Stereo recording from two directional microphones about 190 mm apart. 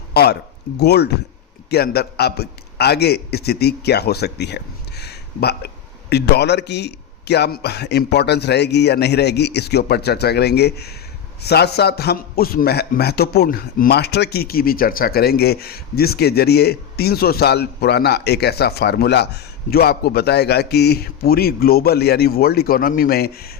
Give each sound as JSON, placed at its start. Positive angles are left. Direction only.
{"t": 0.1, "sound": "a man's voice", "side_deg": 55}